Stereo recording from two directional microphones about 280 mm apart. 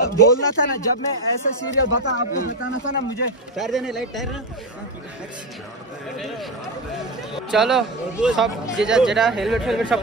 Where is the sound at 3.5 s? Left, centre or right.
Centre.